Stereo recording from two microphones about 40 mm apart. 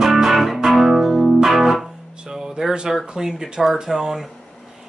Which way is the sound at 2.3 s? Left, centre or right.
Centre.